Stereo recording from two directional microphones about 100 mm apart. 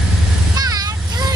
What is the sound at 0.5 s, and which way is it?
Vehicle, 40° right (ahead or behind).